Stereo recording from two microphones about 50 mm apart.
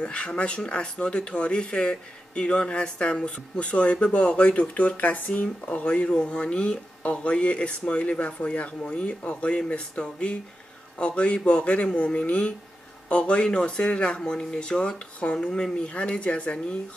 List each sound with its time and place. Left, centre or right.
0.0 s speech: left